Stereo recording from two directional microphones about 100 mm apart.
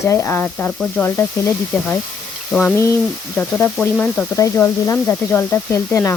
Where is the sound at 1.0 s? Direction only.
25° left (ahead or behind).